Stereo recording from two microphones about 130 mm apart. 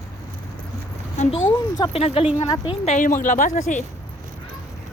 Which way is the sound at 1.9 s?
50° left (ahead or behind).